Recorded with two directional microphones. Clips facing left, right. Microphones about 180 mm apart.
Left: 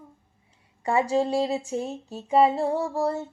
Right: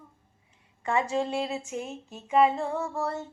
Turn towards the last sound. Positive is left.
turn(degrees=35)  # may be behind; listen again after turning